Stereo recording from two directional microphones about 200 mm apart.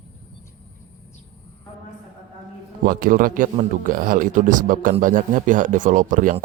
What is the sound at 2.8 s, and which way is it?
Speech, 45° right (ahead or behind).